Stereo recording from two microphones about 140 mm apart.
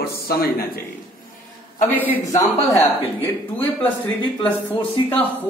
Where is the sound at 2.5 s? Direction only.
55° left (ahead or behind).